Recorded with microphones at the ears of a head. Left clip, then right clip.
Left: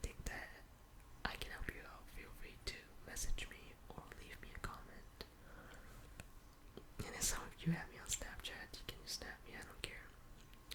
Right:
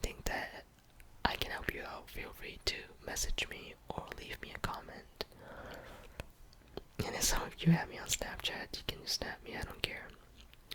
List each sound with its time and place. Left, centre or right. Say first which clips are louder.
0.0 s whispering: right 11 dB; right
6.7 s speech: right 10 dB; right